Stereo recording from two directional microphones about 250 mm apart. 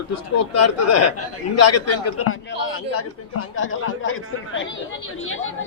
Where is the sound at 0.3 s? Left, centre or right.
Left.